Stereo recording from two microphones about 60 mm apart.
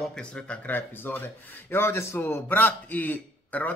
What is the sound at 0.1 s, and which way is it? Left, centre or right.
Speech, centre.